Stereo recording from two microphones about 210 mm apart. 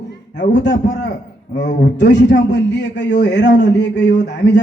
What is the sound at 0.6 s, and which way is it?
A man's voice, 55° left (ahead or behind).